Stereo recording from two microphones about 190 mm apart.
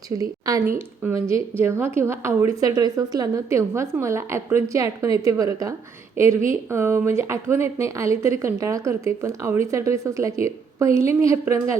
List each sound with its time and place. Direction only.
0.2 s a woman's voice: 20° right (ahead or behind)